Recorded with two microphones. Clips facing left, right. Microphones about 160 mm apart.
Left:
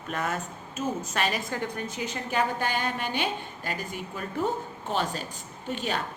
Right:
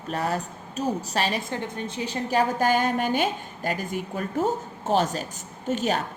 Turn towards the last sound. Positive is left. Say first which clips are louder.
# right 5 dB
turn(degrees=-40)  # may be behind; listen again after turning